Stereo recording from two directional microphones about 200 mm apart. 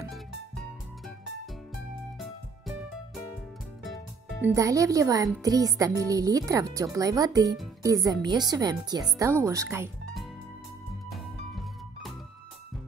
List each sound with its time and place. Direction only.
0.1 s music: centre (ahead or behind)
2.1 s music: centre (ahead or behind)
4.4 s speech: 15° right (ahead or behind)
11.1 s music: centre (ahead or behind)